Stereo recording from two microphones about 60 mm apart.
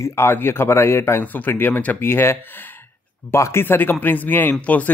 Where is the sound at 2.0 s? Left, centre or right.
Left.